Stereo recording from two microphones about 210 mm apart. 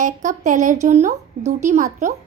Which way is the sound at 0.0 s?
35° right (ahead or behind).